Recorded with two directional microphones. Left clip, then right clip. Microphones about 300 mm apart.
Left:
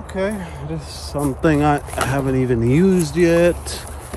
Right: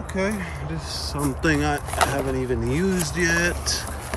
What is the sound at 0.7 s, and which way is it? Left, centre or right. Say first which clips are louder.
Speech: left 1 dB; centre.